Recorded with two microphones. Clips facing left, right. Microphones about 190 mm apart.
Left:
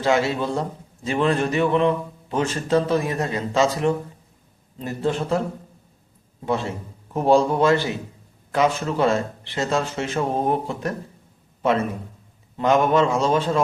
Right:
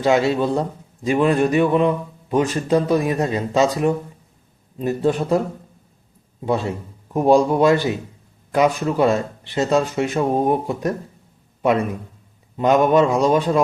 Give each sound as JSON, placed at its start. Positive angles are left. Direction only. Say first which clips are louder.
{"t": 0.0, "sound": "speech", "louder": "right 4 dB", "side_deg": -20}
{"t": 6.4, "sound": "speech", "louder": "right 3 dB", "side_deg": -20}